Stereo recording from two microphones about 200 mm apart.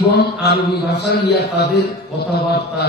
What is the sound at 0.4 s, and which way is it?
A man's voice, 55° left (ahead or behind).